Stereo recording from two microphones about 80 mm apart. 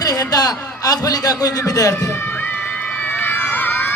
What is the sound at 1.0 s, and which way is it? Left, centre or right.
Speech, left.